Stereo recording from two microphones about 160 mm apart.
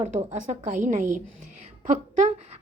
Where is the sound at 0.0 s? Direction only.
45° right (ahead or behind).